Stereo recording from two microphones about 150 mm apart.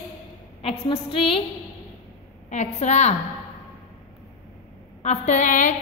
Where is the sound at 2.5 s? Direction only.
50° left (ahead or behind).